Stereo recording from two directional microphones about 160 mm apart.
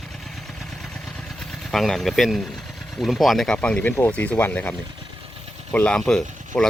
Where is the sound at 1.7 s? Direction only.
Centre (ahead or behind).